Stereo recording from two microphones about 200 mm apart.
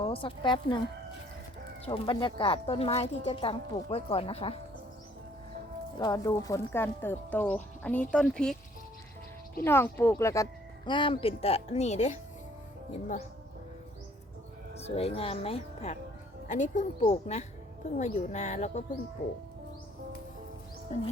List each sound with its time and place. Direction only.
0.0 s speech: 25° left (ahead or behind)
1.8 s speech: 25° left (ahead or behind)
6.0 s speech: 20° left (ahead or behind)
9.6 s speech: 10° left (ahead or behind); by 12.1 s 35° left (ahead or behind)
14.8 s speech: 30° left (ahead or behind)